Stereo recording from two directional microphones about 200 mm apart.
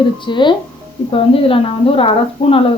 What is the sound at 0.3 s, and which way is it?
A woman's voice, 25° left (ahead or behind).